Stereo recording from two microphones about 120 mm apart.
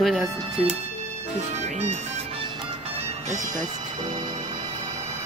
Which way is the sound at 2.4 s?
45° right (ahead or behind).